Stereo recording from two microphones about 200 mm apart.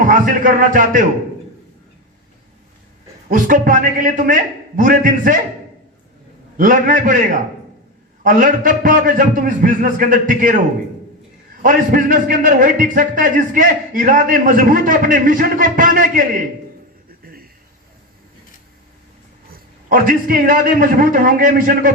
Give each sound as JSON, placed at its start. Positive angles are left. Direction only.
{"t": 0.0, "sound": "a man's voice", "side_deg": -40}
{"t": 3.2, "sound": "a man's voice", "side_deg": -40}
{"t": 6.6, "sound": "a man's voice", "side_deg": -40}
{"t": 11.6, "sound": "a man's voice", "side_deg": -40}
{"t": 19.5, "sound": "a man's voice", "side_deg": -45}